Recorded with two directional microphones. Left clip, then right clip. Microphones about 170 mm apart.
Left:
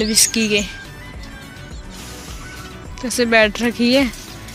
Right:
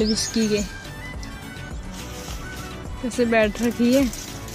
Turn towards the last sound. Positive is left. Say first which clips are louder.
# left 4 dB
turn(degrees=0)  # may be behind; listen again after turning